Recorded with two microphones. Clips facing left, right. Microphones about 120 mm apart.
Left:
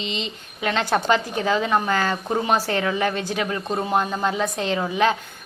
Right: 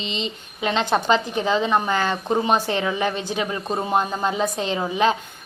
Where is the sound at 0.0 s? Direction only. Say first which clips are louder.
Right 1 dB; 30° right (ahead or behind).